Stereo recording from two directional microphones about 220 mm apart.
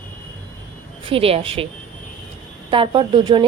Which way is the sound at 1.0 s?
25° right (ahead or behind).